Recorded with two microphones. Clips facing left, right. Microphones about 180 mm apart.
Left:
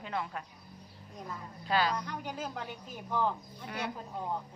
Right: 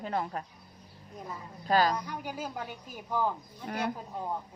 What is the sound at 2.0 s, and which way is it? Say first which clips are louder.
Speech: right 1 dB; 10° right (ahead or behind).